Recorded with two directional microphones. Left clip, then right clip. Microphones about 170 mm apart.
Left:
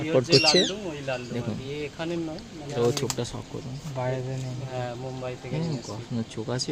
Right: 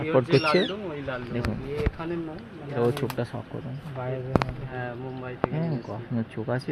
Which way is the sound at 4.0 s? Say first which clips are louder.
Left 4 dB; 90° left.